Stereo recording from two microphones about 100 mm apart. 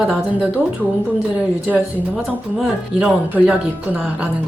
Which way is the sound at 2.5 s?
5° right (ahead or behind).